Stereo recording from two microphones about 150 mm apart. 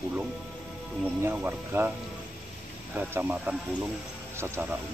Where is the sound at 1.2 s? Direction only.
15° right (ahead or behind).